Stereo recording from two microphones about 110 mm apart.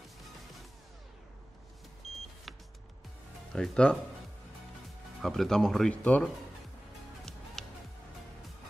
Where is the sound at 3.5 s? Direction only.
5° left (ahead or behind).